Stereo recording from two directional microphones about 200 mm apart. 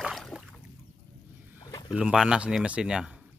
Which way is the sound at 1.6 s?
20° left (ahead or behind).